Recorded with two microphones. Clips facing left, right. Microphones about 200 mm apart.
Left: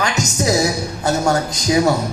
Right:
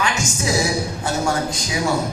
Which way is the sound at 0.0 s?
40° left (ahead or behind).